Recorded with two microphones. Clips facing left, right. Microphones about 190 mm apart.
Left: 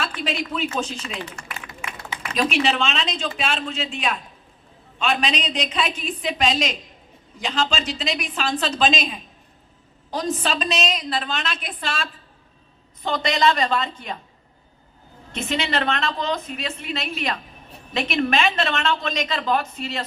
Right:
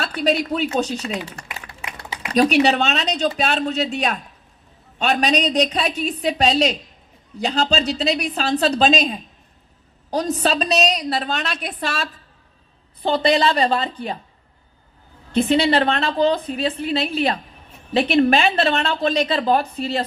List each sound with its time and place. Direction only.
0.0 s a woman's voice: 40° right (ahead or behind)
1.8 s a sound: 35° right (ahead or behind)
2.3 s a woman's voice: 40° right (ahead or behind)
13.0 s a woman's voice: 30° right (ahead or behind)
15.3 s a woman's voice: 35° right (ahead or behind)